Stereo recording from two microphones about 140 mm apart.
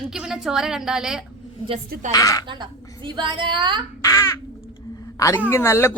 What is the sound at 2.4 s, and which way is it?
A woman's voice, 35° right (ahead or behind).